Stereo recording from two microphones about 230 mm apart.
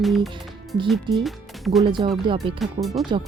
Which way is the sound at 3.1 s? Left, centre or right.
Right.